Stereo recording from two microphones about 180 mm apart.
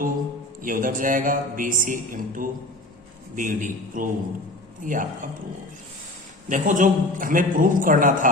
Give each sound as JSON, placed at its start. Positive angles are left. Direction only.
{"t": 0.6, "sound": "speech", "side_deg": -50}
{"t": 6.5, "sound": "speech", "side_deg": -45}